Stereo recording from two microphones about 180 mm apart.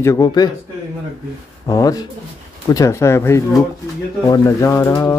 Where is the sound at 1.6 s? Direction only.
20° left (ahead or behind).